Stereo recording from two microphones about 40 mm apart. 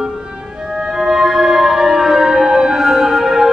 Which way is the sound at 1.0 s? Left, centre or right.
Centre.